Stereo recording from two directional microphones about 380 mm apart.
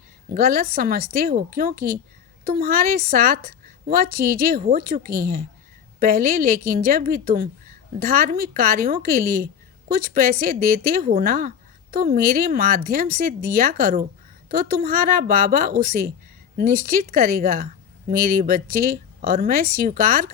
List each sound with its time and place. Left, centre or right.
0.3 s speech: right